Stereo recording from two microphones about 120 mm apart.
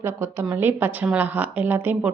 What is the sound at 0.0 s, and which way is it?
A woman's voice, 20° right (ahead or behind).